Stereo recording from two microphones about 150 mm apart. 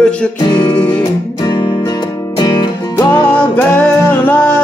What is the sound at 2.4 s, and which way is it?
Music, 25° left (ahead or behind).